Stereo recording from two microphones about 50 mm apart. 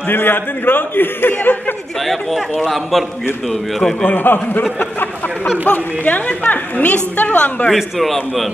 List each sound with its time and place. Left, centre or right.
0.1 s a man's voice: left
2.0 s a man's voice: centre
4.0 s a woman's voice: left
7.7 s a man's voice: centre